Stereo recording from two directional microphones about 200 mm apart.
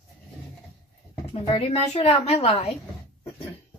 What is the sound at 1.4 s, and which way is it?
A woman's voice, 30° left (ahead or behind).